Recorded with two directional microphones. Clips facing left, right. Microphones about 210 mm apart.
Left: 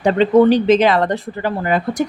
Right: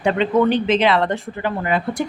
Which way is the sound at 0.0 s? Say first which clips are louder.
Left 5 dB; 35° left (ahead or behind).